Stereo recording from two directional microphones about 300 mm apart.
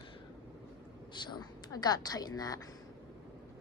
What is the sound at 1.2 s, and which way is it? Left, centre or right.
A woman's voice, centre.